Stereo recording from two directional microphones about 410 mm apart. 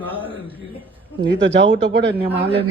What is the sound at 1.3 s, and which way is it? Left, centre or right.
Speech, right.